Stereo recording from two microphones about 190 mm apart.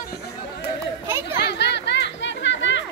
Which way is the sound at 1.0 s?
10° right (ahead or behind).